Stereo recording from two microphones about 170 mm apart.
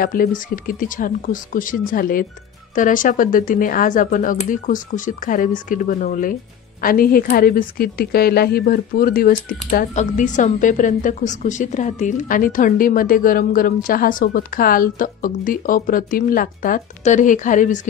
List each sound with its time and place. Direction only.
0.0 s speech: 55° left (ahead or behind)